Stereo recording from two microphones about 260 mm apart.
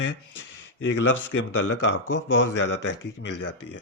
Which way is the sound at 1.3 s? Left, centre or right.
Left.